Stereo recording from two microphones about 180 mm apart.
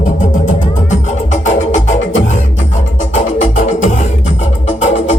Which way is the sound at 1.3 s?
40° left (ahead or behind).